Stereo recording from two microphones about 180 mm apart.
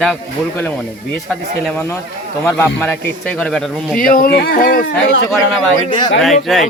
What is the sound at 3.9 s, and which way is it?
Speech, 50° left (ahead or behind).